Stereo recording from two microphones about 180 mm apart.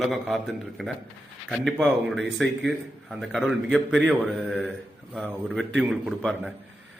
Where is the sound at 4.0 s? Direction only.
5° right (ahead or behind).